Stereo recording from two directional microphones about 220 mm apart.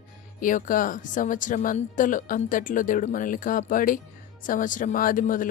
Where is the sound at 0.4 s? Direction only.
35° left (ahead or behind).